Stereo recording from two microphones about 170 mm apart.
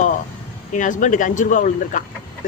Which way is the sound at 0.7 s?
50° left (ahead or behind).